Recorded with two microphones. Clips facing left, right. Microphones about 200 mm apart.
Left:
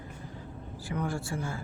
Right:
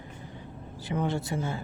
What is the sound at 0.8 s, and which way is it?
Speech, 25° right (ahead or behind).